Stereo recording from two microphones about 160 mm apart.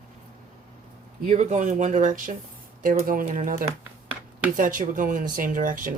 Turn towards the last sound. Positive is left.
turn(degrees=-55)  # may be behind; listen again after turning